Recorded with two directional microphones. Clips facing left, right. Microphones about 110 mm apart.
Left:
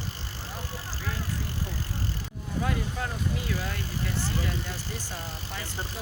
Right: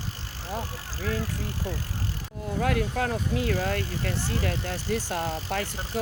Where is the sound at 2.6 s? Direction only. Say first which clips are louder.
Right 6 dB; 65° right (ahead or behind).